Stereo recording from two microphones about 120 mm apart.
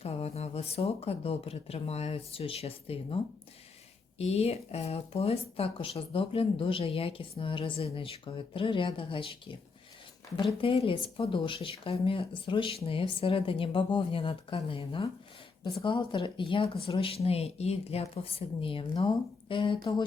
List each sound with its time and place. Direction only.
0.0 s speech: 60° left (ahead or behind)
4.2 s speech: 60° left (ahead or behind)
10.6 s speech: 50° left (ahead or behind)